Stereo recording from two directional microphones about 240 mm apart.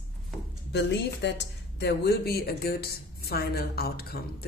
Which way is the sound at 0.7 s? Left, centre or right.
Left.